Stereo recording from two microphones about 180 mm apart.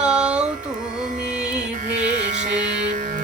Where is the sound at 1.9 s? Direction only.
45° right (ahead or behind).